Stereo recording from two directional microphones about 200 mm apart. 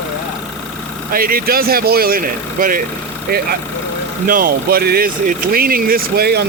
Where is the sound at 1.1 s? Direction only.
45° right (ahead or behind).